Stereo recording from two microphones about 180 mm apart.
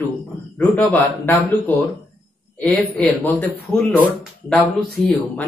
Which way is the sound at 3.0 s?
10° left (ahead or behind).